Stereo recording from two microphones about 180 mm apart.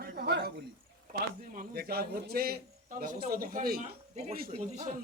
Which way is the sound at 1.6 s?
60° right (ahead or behind).